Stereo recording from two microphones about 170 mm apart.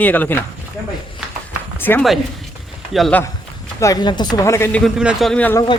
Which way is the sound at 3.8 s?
20° left (ahead or behind).